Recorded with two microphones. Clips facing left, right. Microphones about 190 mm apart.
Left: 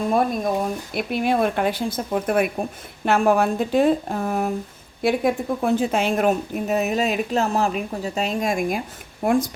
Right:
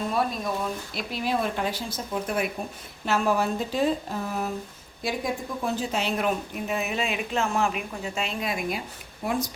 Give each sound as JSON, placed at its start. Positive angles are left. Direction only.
{"t": 0.1, "sound": "a woman's voice", "side_deg": 50}